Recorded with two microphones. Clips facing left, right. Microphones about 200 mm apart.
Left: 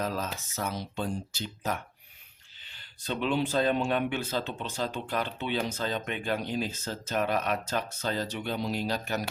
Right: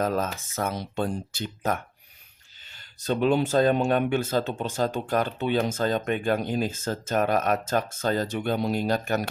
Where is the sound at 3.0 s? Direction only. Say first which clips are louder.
Right 6 dB; 45° right (ahead or behind).